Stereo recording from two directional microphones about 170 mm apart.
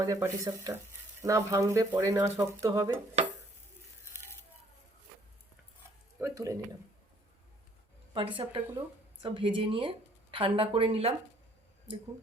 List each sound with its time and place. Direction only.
0.0 s speech: 20° right (ahead or behind)
6.1 s speech: 15° right (ahead or behind)
8.1 s speech: 30° right (ahead or behind)